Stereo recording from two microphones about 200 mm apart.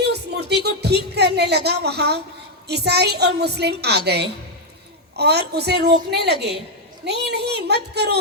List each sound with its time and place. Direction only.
0.0 s music: 55° right (ahead or behind)
2.6 s a woman's voice: 55° right (ahead or behind)